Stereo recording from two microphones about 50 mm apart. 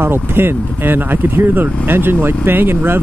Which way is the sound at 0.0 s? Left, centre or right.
Right.